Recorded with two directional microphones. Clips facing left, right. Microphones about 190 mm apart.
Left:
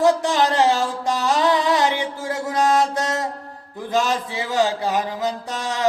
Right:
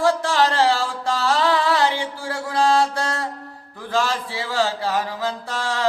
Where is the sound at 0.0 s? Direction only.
20° left (ahead or behind).